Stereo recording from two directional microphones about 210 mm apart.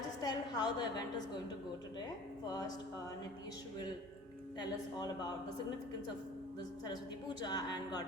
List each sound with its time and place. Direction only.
0.2 s a woman's voice: 20° left (ahead or behind)
2.5 s speech: 20° left (ahead or behind)
6.8 s a woman's voice: 20° left (ahead or behind)